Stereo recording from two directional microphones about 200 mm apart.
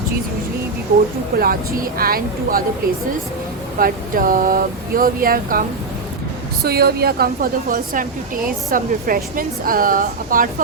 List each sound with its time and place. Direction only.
1.4 s speech: 45° right (ahead or behind)
3.8 s speech: 45° right (ahead or behind)
6.7 s speech: 50° right (ahead or behind)